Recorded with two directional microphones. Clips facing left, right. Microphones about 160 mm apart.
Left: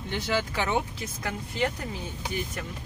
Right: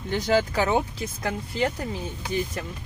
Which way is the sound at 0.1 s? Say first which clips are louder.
Right 6 dB; 40° right (ahead or behind).